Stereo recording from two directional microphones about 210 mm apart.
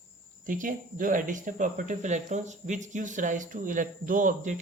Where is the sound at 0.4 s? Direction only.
40° right (ahead or behind).